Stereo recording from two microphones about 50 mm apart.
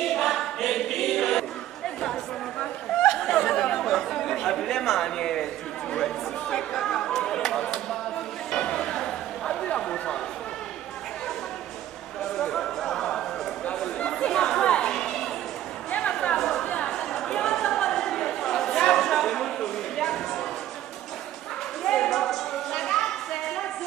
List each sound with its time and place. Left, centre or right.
0.0 s choir: centre
3.0 s chatter: centre
8.5 s a sound: centre
12.4 s chatter: centre
16.0 s a sound: centre
16.3 s chatter: centre
16.6 s chatter: left
16.9 s chatter: centre
21.8 s a sound: centre